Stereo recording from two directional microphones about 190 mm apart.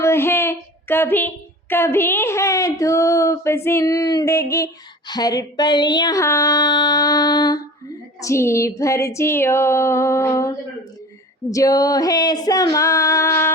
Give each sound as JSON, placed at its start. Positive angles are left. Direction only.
{"t": 0.0, "sound": "a sound", "side_deg": 15}
{"t": 1.7, "sound": "a woman's voice", "side_deg": 10}
{"t": 11.5, "sound": "a woman's voice", "side_deg": 20}